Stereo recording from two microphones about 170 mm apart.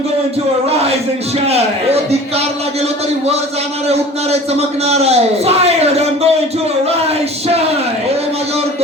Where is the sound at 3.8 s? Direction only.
40° right (ahead or behind).